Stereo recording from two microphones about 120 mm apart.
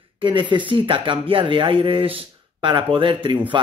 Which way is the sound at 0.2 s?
45° right (ahead or behind).